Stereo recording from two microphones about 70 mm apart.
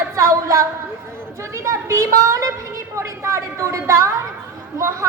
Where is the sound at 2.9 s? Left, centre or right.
Right.